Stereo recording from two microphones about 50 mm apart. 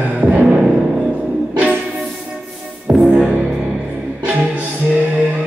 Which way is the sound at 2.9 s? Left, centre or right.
Right.